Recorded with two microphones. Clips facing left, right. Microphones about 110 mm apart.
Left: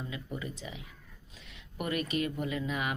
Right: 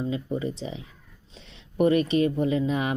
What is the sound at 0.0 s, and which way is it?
Speech, 30° right (ahead or behind).